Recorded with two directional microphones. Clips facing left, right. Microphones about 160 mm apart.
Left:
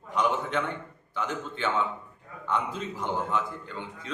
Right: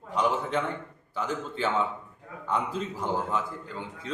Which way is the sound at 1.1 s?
35° right (ahead or behind).